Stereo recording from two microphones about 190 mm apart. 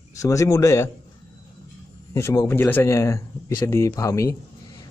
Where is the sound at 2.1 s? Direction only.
15° left (ahead or behind).